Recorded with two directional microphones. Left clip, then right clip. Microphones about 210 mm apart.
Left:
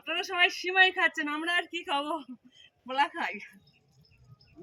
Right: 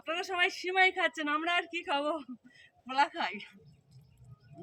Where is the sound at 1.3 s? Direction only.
15° right (ahead or behind).